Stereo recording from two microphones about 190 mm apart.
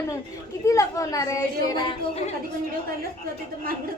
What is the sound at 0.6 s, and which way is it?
Speech, 15° left (ahead or behind).